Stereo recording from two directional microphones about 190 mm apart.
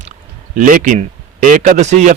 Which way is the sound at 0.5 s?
45° right (ahead or behind).